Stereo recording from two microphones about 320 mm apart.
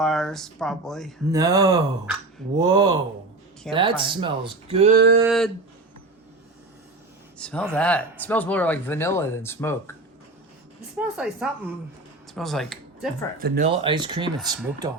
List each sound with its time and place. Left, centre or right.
0.0 s speech: centre
1.3 s speech: centre; by 5.1 s right
5.2 s speech: centre
7.3 s speech: centre
10.9 s speech: centre
13.4 s speech: centre